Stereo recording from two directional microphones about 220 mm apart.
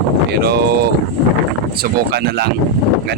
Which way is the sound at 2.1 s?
50° right (ahead or behind).